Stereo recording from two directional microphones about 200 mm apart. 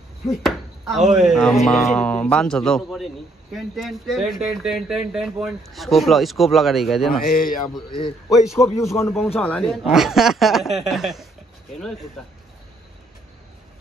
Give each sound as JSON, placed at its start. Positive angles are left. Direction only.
{"t": 0.3, "sound": "speech", "side_deg": 0}
{"t": 7.2, "sound": "speech", "side_deg": 45}
{"t": 8.3, "sound": "speech", "side_deg": 0}
{"t": 8.7, "sound": "a man's voice", "side_deg": 15}